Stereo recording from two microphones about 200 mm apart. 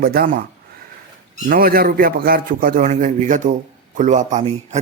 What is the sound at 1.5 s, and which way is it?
A man's voice, 50° right (ahead or behind).